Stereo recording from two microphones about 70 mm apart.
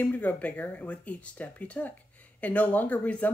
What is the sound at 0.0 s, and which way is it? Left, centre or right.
Speech, left.